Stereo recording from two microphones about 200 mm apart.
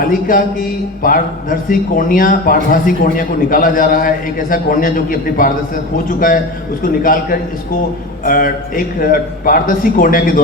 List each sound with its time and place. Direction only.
0.0 s a man's voice: 45° left (ahead or behind)